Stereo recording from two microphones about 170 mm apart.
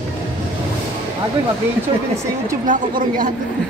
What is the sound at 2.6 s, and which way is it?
Speech, 55° right (ahead or behind).